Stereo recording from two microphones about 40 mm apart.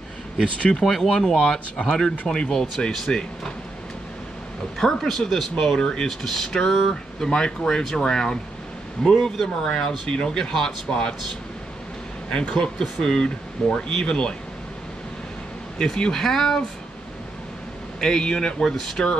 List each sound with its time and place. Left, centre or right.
0.6 s speech: left
0.8 s speech: centre
4.7 s speech: centre
12.3 s speech: left
15.8 s speech: centre
18.0 s speech: centre